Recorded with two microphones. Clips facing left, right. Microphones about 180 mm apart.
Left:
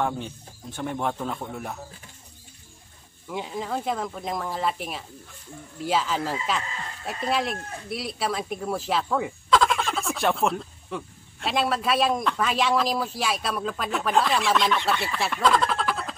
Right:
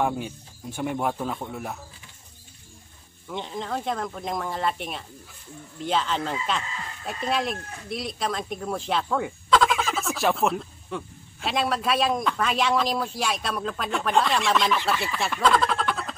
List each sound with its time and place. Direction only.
0.0 s speech: 10° right (ahead or behind)
3.3 s speech: 5° left (ahead or behind)